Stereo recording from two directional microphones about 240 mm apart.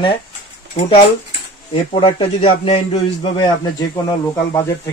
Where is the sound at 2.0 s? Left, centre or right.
Left.